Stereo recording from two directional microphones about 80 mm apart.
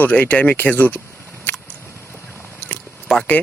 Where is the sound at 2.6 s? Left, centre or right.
Centre.